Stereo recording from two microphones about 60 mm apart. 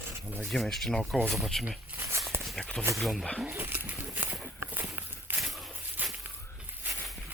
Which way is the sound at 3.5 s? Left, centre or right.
Right.